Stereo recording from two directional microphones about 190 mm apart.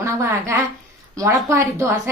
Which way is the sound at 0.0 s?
15° right (ahead or behind).